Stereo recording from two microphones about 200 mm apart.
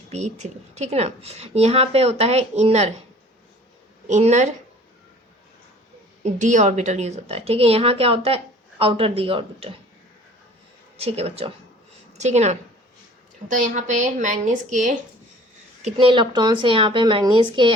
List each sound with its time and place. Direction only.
0.1 s a woman's voice: 35° right (ahead or behind)
4.1 s a woman's voice: 35° right (ahead or behind)
6.2 s a woman's voice: 35° right (ahead or behind)
10.9 s a woman's voice: 30° right (ahead or behind)
15.8 s a woman's voice: 25° right (ahead or behind)